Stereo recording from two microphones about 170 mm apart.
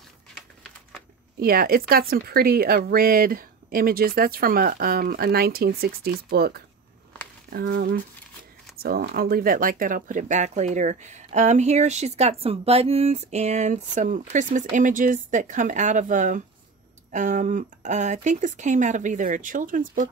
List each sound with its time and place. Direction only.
1.4 s a woman's voice: 60° right (ahead or behind)